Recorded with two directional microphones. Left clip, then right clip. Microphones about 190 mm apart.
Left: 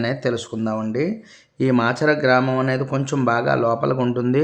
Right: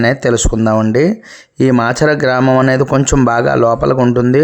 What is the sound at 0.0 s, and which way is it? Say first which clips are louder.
Speech: right 10 dB; 45° right (ahead or behind).